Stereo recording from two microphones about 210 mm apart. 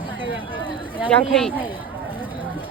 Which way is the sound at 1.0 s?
5° left (ahead or behind).